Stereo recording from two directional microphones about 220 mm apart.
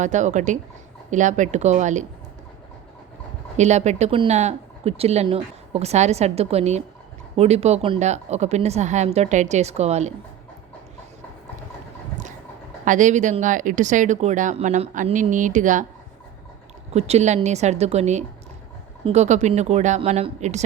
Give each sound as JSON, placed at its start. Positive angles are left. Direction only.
{"t": 0.0, "sound": "speech", "side_deg": -35}
{"t": 3.6, "sound": "speech", "side_deg": -30}
{"t": 12.8, "sound": "speech", "side_deg": -35}
{"t": 16.9, "sound": "speech", "side_deg": -30}